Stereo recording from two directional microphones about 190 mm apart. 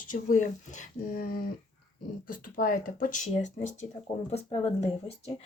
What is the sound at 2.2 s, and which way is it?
Speech, 45° left (ahead or behind).